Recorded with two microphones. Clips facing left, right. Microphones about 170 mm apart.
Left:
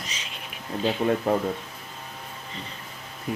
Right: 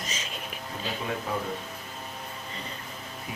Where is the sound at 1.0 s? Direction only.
50° left (ahead or behind).